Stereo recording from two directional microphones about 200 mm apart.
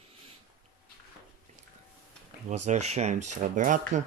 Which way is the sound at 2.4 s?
35° right (ahead or behind).